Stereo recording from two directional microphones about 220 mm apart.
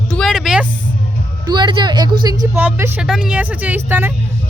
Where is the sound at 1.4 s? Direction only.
20° right (ahead or behind).